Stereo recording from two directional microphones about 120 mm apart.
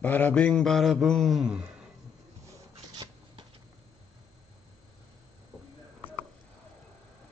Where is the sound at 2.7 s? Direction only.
45° right (ahead or behind).